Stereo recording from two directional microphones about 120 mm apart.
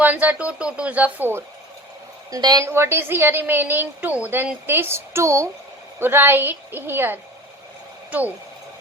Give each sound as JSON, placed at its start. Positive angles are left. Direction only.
{"t": 0.0, "sound": "speech", "side_deg": -15}
{"t": 2.3, "sound": "a woman's voice", "side_deg": -35}
{"t": 2.6, "sound": "a woman's voice", "side_deg": -20}